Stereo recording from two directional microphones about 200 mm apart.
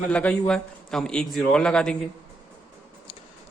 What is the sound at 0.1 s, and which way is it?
A man's voice, 5° left (ahead or behind).